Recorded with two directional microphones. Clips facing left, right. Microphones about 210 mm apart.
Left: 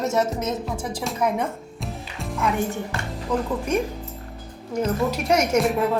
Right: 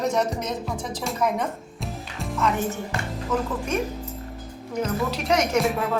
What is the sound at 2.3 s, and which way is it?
Speech, 15° left (ahead or behind).